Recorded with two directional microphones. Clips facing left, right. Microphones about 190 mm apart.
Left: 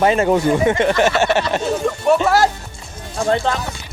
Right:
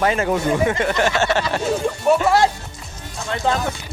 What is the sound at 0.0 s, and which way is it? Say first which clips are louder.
Speech: left 4 dB; 25° left (ahead or behind).